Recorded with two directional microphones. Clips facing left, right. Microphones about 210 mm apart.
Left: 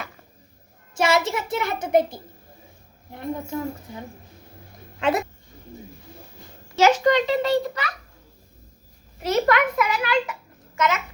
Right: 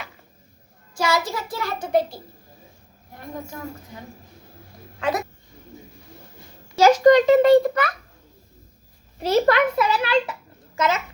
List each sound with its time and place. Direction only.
0.9 s a child's voice: 25° left (ahead or behind)
4.9 s speech: 25° left (ahead or behind)
6.7 s a child's voice: 40° right (ahead or behind)
9.2 s a child's voice: 30° right (ahead or behind)